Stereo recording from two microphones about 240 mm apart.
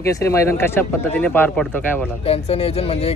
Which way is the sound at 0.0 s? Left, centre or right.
Centre.